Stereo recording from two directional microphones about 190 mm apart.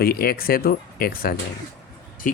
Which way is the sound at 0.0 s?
50° left (ahead or behind).